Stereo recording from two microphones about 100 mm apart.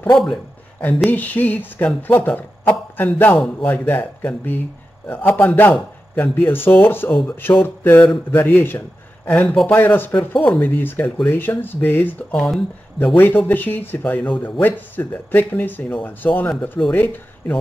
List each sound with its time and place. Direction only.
0.1 s speech: 5° left (ahead or behind)
0.7 s a man's voice: 15° left (ahead or behind)
9.4 s speech: 5° left (ahead or behind)
9.7 s speech: 20° left (ahead or behind)
12.3 s speech: 5° left (ahead or behind)
13.1 s speech: 20° left (ahead or behind)